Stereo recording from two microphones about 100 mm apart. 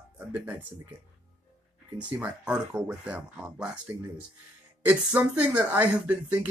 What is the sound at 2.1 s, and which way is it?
Speech, 15° right (ahead or behind).